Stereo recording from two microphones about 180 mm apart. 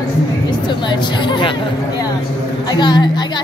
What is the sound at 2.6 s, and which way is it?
Speech, 25° left (ahead or behind).